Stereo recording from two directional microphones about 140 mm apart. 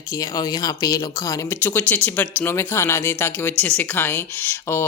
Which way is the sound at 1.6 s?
10° left (ahead or behind).